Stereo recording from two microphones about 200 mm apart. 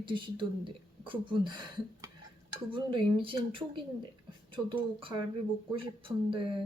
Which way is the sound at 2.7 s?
25° right (ahead or behind).